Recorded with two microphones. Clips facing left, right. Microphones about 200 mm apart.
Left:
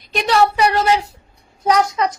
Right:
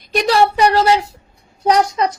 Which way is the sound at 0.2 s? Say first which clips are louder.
Right 2 dB; 35° right (ahead or behind).